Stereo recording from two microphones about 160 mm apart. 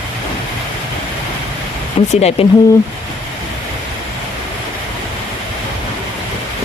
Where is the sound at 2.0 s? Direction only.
45° left (ahead or behind).